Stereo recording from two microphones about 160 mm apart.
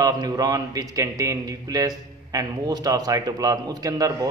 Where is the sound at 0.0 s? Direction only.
25° right (ahead or behind).